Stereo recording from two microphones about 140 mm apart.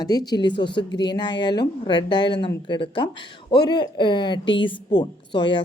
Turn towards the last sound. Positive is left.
turn(degrees=35)  # may be behind; listen again after turning